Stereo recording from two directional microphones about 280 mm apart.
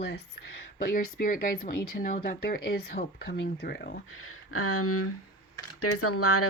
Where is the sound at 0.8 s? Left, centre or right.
Left.